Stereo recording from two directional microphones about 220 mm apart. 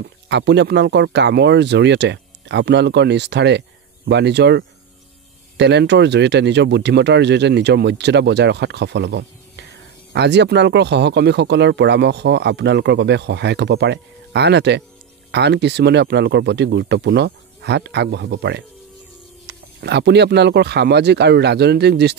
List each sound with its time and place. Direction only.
0.3 s speech: 55° right (ahead or behind)